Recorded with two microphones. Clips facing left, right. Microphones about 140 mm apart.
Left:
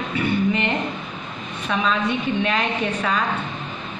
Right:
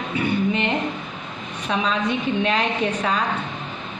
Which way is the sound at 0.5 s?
20° right (ahead or behind).